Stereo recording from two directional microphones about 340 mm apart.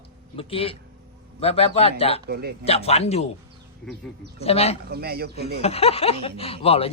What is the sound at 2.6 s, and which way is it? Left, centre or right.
Speech, centre.